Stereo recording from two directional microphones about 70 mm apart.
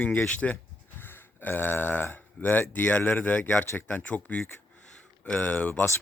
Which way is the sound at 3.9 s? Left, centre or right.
Centre.